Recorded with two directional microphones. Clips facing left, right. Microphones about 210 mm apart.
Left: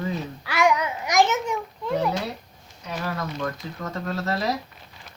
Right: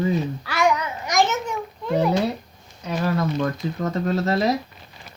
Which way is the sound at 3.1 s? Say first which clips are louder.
Right 7 dB; 30° right (ahead or behind).